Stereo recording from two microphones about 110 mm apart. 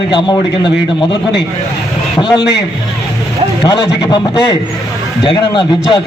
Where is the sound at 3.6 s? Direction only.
35° left (ahead or behind).